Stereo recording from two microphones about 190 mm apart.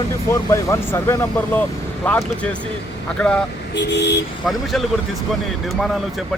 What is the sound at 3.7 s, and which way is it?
Speech, 65° left (ahead or behind).